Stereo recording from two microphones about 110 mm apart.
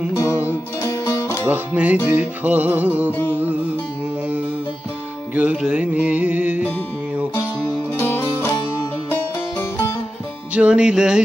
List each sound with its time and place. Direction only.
0.2 s music: 25° left (ahead or behind)
1.5 s music: 15° right (ahead or behind)
3.1 s music: 20° left (ahead or behind)
3.4 s music: 10° right (ahead or behind)
5.3 s music: 15° right (ahead or behind)
7.9 s music: 20° left (ahead or behind)
9.6 s music: 20° left (ahead or behind)
10.5 s music: 10° right (ahead or behind)